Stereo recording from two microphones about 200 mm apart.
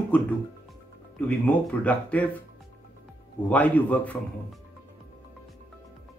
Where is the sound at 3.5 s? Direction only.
5° left (ahead or behind).